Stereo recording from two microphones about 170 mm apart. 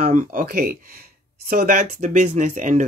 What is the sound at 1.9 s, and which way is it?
Speech, 45° right (ahead or behind).